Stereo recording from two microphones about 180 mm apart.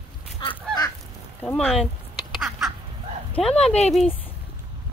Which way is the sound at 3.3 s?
5° left (ahead or behind).